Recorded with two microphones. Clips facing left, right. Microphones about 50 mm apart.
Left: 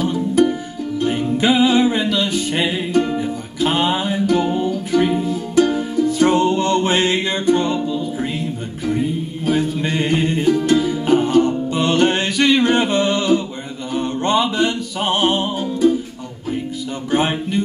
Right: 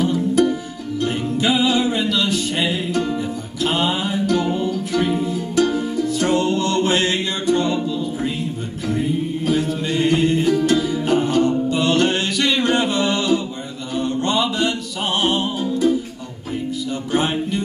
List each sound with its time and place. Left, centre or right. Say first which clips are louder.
0.1 s music: left 1 dB; left
9.5 s music: left 3 dB; left
17.1 s music: left 2 dB; left